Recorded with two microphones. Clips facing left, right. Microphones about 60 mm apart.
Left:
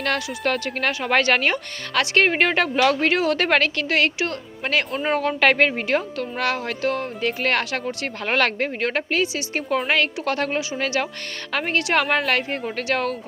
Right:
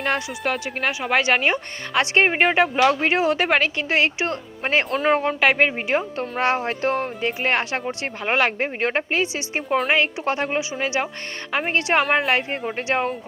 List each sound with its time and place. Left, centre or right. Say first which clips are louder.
0.0 s speech: even; centre; by 5.4 s right
5.4 s a woman's voice: left 1 dB; centre
6.1 s a woman's voice: right 2 dB; right